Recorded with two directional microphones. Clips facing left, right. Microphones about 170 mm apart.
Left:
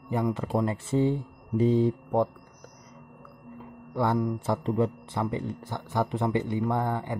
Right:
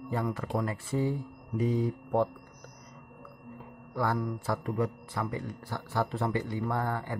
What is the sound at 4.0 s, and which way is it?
Speech, 20° left (ahead or behind).